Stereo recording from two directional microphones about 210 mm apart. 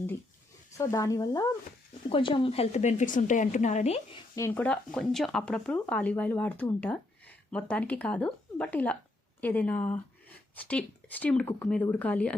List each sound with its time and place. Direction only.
0.8 s a woman's voice: 15° left (ahead or behind)
4.4 s speech: 10° left (ahead or behind)